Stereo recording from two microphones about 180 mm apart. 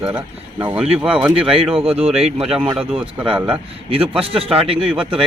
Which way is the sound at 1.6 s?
30° right (ahead or behind).